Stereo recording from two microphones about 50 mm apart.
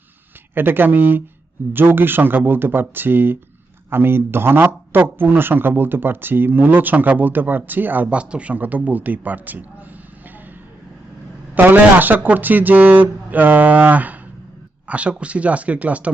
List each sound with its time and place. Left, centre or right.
0.5 s speech: right
8.1 s speech: right
11.5 s speech: right